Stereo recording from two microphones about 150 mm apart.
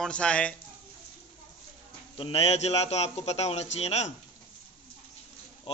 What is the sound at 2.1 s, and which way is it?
A man's voice, 40° left (ahead or behind).